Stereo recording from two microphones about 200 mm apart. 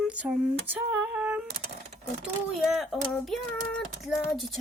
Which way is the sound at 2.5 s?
Centre (ahead or behind).